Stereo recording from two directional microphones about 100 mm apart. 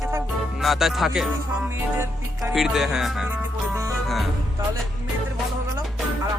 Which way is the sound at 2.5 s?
5° right (ahead or behind).